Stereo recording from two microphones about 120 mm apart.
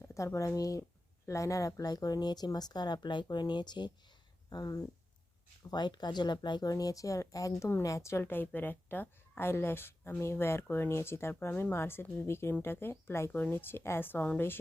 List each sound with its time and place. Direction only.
0.0 s a woman's voice: 25° left (ahead or behind)